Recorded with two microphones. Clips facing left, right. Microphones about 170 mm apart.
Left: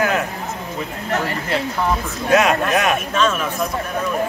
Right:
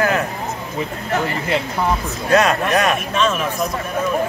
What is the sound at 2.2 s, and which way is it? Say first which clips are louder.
Speech: even; 5° left (ahead or behind).